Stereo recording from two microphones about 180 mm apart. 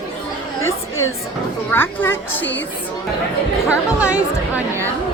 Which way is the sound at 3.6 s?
5° right (ahead or behind).